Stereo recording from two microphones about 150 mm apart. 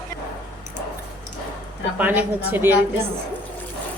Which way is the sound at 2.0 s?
10° right (ahead or behind).